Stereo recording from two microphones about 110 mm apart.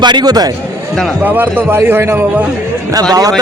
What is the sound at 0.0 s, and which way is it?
Speech, 40° right (ahead or behind).